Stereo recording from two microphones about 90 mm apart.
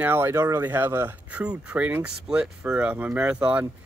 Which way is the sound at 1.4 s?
10° right (ahead or behind).